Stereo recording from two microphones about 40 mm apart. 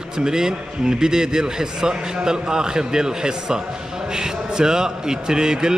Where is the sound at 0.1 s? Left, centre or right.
Centre.